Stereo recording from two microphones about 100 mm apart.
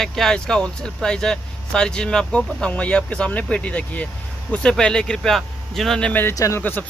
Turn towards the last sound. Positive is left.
turn(degrees=20)  # may be behind; listen again after turning